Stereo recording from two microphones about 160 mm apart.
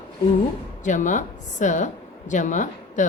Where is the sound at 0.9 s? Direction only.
50° left (ahead or behind).